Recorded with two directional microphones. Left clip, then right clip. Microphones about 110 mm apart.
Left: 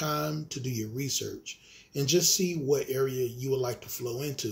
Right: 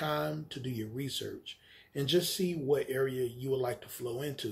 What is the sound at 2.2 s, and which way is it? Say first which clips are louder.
Speech: left 7 dB; 45° right (ahead or behind).